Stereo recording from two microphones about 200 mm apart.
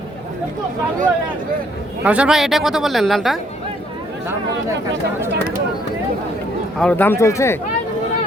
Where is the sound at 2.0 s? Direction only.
5° right (ahead or behind).